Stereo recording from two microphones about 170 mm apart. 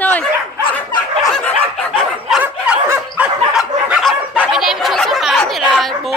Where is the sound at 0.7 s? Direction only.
25° left (ahead or behind).